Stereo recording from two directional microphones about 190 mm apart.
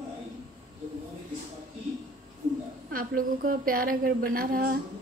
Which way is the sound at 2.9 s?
50° right (ahead or behind).